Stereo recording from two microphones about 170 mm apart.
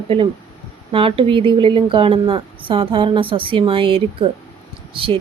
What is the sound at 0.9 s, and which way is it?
A woman's voice, 30° right (ahead or behind).